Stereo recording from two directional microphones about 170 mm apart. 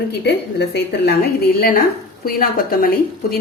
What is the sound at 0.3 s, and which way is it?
A woman's voice, 70° left (ahead or behind).